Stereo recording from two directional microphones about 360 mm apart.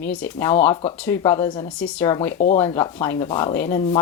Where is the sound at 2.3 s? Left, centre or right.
Left.